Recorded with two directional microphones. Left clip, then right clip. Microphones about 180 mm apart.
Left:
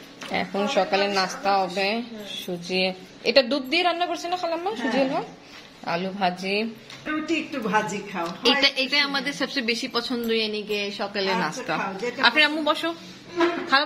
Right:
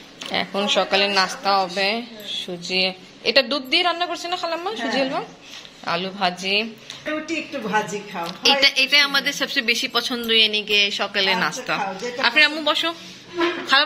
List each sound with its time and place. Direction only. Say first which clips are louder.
0.6 s a woman's voice: right 3 dB; centre (ahead or behind)
7.2 s a woman's voice: even; 45° right (ahead or behind)
8.3 s a woman's voice: right 4 dB; 10° left (ahead or behind)
13.7 s music: right 4 dB; 5° left (ahead or behind)